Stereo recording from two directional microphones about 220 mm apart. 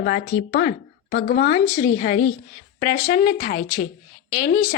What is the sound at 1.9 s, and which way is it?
A woman's voice, 40° left (ahead or behind).